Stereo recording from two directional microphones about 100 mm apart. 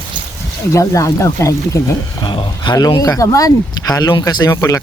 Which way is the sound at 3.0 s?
35° left (ahead or behind).